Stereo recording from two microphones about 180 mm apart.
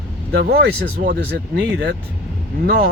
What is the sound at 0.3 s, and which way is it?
Speech, 60° right (ahead or behind).